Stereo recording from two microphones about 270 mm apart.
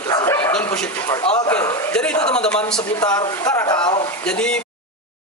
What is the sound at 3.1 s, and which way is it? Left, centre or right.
Speech, centre.